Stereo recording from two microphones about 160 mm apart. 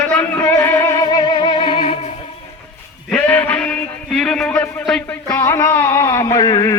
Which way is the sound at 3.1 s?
10° left (ahead or behind).